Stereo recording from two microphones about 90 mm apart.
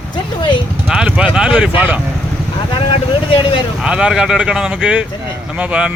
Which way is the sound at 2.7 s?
65° left (ahead or behind).